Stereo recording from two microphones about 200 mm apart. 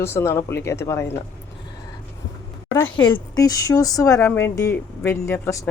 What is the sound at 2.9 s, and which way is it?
A woman's voice, 25° left (ahead or behind).